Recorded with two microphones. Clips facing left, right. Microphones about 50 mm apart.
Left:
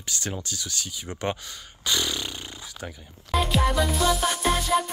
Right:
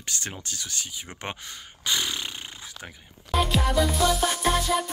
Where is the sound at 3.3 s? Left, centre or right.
Right.